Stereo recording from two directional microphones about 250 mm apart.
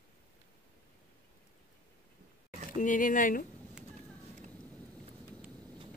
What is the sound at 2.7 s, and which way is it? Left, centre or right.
Speech, left.